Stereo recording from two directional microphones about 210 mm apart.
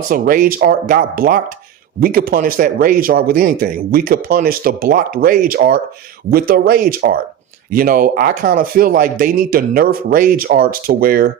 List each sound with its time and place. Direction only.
0.1 s speech: 45° right (ahead or behind)